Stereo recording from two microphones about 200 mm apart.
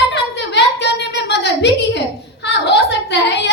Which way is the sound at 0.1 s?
60° left (ahead or behind).